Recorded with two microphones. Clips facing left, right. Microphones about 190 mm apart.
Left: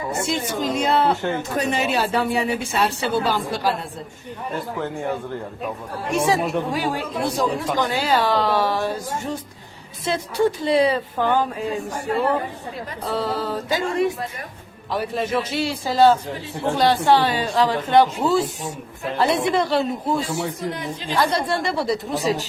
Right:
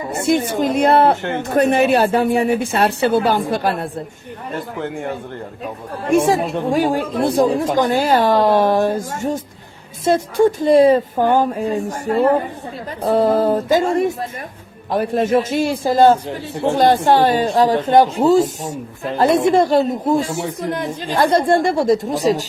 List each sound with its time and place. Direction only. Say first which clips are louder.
0.2 s speech: right 10 dB; 55° right (ahead or behind)
6.1 s speech: right 5 dB; 50° right (ahead or behind)